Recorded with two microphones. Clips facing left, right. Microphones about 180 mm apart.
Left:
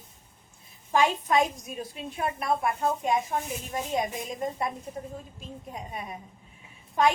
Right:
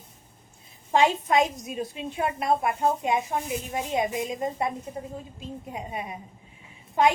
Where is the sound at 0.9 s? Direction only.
25° right (ahead or behind).